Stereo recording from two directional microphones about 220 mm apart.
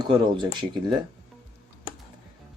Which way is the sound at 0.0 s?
20° right (ahead or behind).